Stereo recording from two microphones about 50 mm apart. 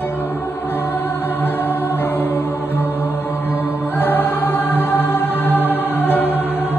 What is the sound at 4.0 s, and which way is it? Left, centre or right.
Music, left.